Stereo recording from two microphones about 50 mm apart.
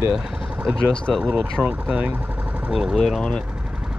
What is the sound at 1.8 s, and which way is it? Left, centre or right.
Speech, right.